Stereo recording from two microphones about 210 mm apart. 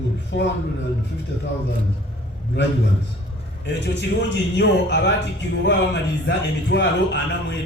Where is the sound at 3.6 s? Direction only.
55° left (ahead or behind).